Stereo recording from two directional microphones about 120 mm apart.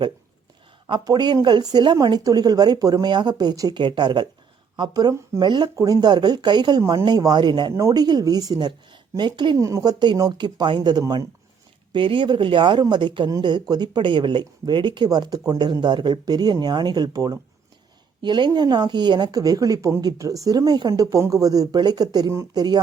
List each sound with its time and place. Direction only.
0.9 s speech: 35° right (ahead or behind)
9.6 s speech: 25° right (ahead or behind)
11.9 s speech: 45° right (ahead or behind)